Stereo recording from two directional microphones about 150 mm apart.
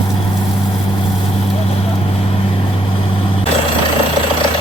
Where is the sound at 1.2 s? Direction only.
40° left (ahead or behind).